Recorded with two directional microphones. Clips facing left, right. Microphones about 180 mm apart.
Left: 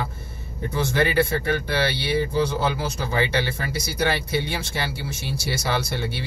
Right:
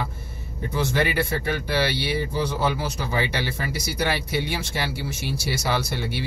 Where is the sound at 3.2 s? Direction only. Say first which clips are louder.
Left 3 dB; 10° right (ahead or behind).